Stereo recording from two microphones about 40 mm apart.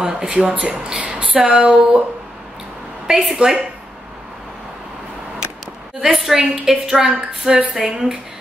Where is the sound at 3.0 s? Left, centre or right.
Centre.